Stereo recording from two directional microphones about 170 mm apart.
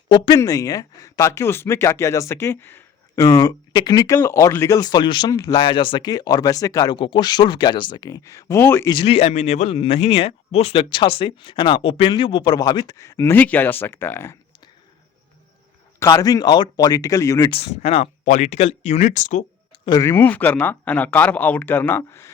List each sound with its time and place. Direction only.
0.1 s speech: 20° left (ahead or behind)
8.9 s speech: 30° left (ahead or behind); by 14.3 s 15° left (ahead or behind)
16.0 s speech: 20° left (ahead or behind)
17.5 s speech: 35° left (ahead or behind)
19.8 s speech: 20° left (ahead or behind)